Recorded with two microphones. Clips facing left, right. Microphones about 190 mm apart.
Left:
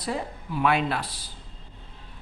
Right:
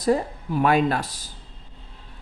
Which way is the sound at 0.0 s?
45° right (ahead or behind).